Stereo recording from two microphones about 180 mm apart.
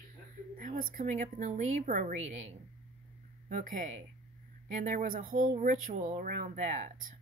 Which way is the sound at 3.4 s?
45° right (ahead or behind).